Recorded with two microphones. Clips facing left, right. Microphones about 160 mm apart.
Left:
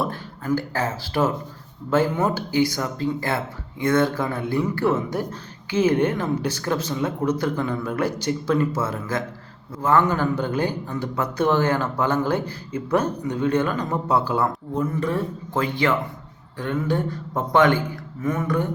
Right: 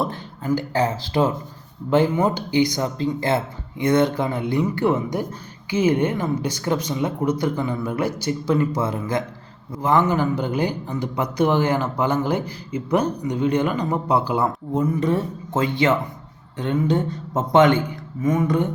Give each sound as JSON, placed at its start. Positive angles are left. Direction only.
{"t": 0.0, "sound": "speech", "side_deg": -20}